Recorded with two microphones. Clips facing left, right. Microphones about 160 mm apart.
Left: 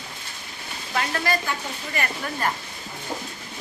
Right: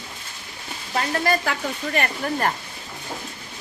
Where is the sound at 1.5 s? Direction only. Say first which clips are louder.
Right 5 dB; 60° right (ahead or behind).